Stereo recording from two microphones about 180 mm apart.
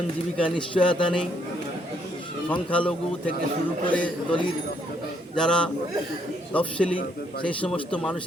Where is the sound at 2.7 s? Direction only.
5° left (ahead or behind).